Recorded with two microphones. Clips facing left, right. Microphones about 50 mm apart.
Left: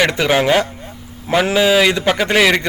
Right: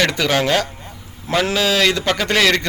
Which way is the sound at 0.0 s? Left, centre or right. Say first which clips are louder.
Left 3 dB; centre.